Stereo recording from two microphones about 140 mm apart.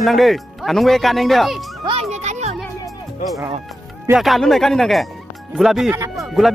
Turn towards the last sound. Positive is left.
turn(degrees=0)  # may be behind; listen again after turning